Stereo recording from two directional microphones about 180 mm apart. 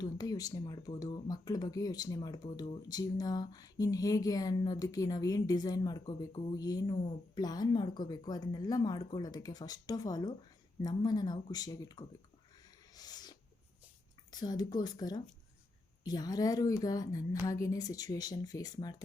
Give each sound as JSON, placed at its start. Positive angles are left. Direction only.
{"t": 0.0, "sound": "speech", "side_deg": 20}
{"t": 13.0, "sound": "a sound", "side_deg": 20}
{"t": 14.3, "sound": "speech", "side_deg": 20}